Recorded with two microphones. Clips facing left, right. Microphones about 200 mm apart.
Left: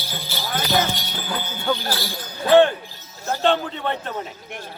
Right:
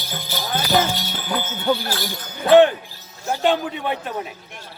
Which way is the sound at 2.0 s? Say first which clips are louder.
Even; 20° right (ahead or behind).